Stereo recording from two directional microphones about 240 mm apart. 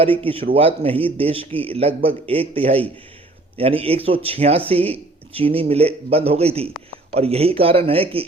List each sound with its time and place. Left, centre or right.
0.0 s speech: right